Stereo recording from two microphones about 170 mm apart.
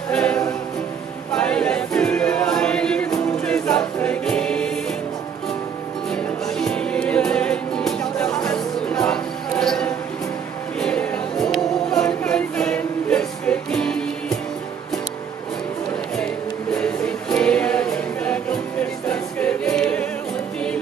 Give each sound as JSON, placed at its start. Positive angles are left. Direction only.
{"t": 0.1, "sound": "music", "side_deg": 5}
{"t": 1.3, "sound": "choir", "side_deg": 5}
{"t": 6.1, "sound": "music", "side_deg": 5}
{"t": 10.8, "sound": "choir", "side_deg": 5}
{"t": 16.7, "sound": "music", "side_deg": 5}
{"t": 19.0, "sound": "choir", "side_deg": 5}